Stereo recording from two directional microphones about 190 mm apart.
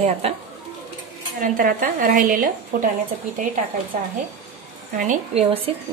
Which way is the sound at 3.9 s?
40° right (ahead or behind).